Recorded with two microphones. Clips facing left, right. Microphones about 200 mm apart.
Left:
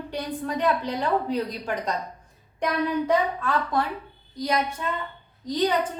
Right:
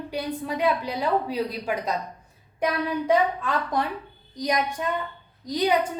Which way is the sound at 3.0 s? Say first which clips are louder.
Right 1 dB; 15° right (ahead or behind).